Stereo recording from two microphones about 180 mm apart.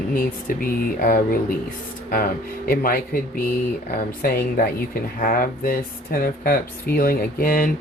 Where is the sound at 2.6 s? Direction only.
55° left (ahead or behind).